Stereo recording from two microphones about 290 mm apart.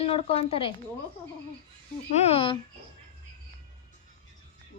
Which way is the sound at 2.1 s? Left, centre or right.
Left.